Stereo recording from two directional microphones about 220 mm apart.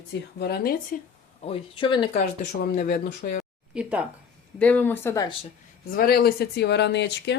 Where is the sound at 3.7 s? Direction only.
5° right (ahead or behind).